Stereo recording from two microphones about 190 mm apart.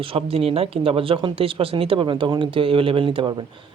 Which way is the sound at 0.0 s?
30° right (ahead or behind).